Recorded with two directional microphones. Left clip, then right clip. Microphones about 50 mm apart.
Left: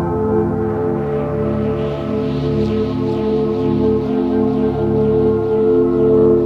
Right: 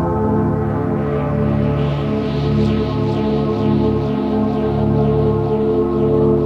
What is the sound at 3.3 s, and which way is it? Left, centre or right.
Music, left.